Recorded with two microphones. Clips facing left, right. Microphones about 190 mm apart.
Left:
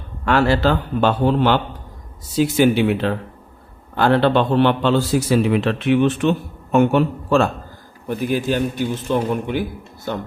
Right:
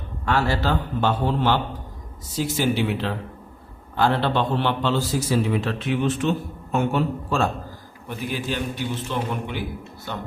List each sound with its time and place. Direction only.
0.3 s a man's voice: 70° left (ahead or behind)
8.0 s a man's voice: 45° left (ahead or behind)